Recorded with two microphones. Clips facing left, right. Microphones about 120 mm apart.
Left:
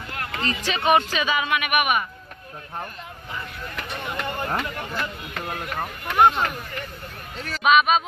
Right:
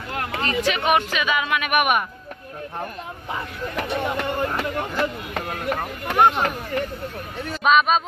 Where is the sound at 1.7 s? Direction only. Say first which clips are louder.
Right 4 dB; centre (ahead or behind).